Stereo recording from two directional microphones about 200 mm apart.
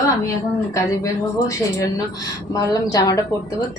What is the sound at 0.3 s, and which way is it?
A woman's voice, 15° left (ahead or behind).